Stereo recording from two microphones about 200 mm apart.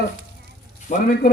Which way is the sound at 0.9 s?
40° left (ahead or behind).